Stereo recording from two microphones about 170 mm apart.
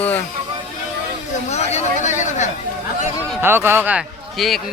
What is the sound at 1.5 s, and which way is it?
Chatter, 40° left (ahead or behind).